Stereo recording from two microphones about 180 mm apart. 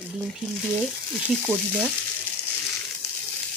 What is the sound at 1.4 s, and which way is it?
Speech, 10° right (ahead or behind).